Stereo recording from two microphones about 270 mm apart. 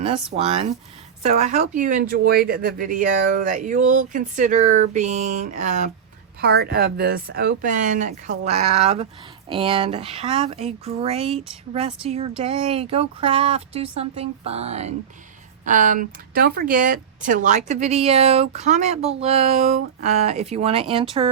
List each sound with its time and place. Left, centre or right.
0.3 s speech: right